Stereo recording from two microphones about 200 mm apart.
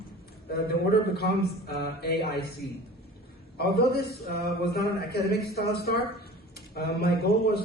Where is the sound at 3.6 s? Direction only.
50° left (ahead or behind).